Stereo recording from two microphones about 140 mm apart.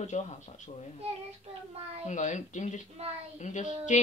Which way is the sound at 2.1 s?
60° left (ahead or behind).